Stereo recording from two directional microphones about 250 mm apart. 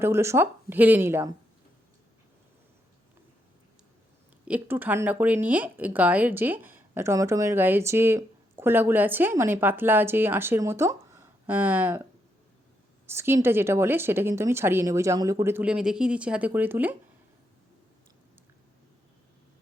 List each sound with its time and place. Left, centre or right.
0.0 s speech: centre
4.4 s speech: centre
13.1 s speech: centre